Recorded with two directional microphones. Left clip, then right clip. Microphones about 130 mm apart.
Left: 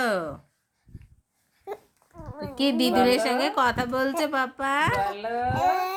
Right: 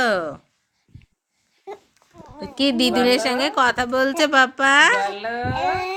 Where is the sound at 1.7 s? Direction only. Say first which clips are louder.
Right 1 dB; 35° left (ahead or behind).